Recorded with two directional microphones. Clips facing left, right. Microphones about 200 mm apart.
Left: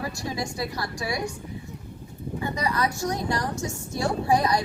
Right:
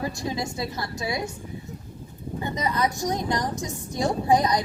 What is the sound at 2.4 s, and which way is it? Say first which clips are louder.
A woman's voice: right 1 dB; 20° right (ahead or behind).